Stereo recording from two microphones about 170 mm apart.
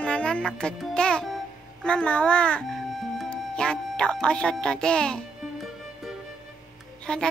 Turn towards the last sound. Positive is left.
turn(degrees=5)  # may be behind; listen again after turning